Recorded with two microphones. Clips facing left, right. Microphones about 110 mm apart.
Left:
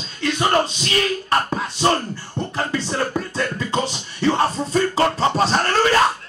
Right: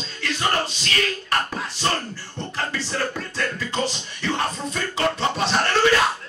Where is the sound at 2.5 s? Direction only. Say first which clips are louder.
Left 4 dB; 25° left (ahead or behind); by 6.0 s 40° left (ahead or behind).